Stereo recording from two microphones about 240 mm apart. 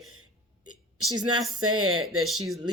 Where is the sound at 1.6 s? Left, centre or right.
Right.